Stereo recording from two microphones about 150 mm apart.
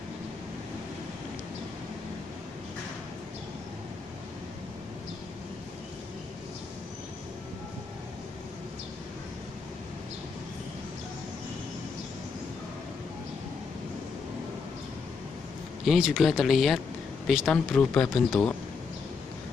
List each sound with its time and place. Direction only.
15.8 s speech: centre (ahead or behind)